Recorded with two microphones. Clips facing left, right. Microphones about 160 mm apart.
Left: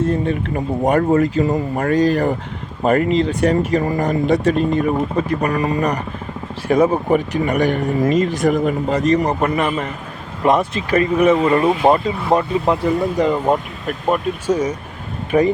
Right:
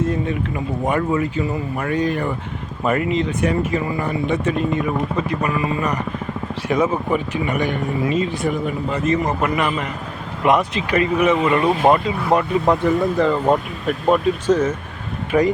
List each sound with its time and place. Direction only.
0.0 s speech: 35° left (ahead or behind)
10.6 s speech: 40° left (ahead or behind)
12.3 s speech: 20° left (ahead or behind)
15.3 s speech: 30° left (ahead or behind)